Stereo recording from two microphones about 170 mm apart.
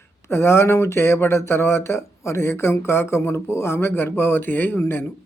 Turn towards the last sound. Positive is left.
turn(degrees=15)  # may be behind; listen again after turning